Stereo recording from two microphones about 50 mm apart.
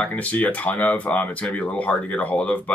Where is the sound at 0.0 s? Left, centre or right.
Left.